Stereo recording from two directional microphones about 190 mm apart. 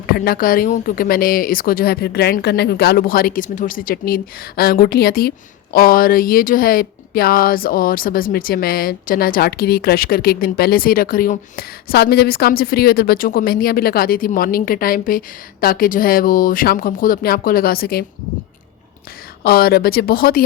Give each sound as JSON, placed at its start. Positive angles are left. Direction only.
{"t": 0.1, "sound": "speech", "side_deg": 50}
{"t": 19.4, "sound": "speech", "side_deg": 50}